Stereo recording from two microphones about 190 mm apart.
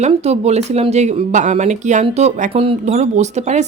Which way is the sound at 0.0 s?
35° right (ahead or behind).